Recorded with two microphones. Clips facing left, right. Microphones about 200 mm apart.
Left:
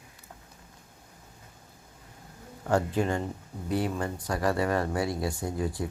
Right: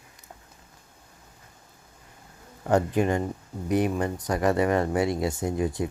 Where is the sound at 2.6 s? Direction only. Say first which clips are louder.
Right 4 dB; 20° right (ahead or behind).